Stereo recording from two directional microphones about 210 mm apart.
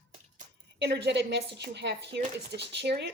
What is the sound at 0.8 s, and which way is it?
A woman's voice, 50° right (ahead or behind).